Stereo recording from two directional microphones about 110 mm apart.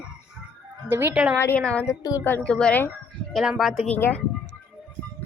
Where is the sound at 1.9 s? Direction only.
35° left (ahead or behind).